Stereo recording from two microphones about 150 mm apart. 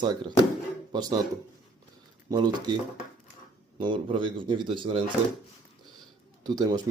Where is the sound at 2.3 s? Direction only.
25° right (ahead or behind).